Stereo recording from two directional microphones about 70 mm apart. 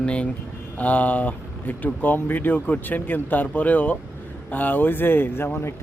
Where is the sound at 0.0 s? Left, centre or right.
Centre.